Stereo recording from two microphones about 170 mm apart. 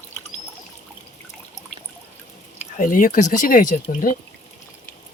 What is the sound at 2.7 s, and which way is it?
Speech, 50° left (ahead or behind).